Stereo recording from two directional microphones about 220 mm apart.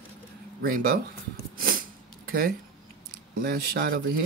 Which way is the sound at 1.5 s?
40° right (ahead or behind).